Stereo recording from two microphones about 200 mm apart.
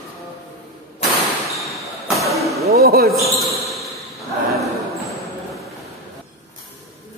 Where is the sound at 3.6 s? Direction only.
Centre (ahead or behind).